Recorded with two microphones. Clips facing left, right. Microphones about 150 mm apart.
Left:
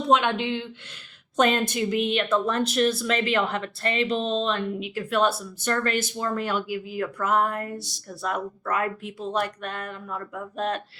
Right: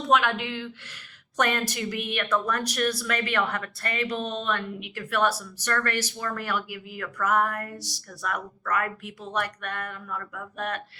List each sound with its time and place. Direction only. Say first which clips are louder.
0.1 s a woman's voice: left 2 dB; 25° left (ahead or behind)